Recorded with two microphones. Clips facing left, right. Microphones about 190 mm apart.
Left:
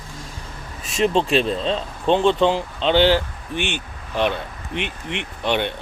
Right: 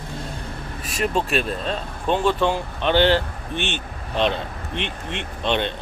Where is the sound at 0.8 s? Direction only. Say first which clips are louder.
Left 4 dB; 25° left (ahead or behind).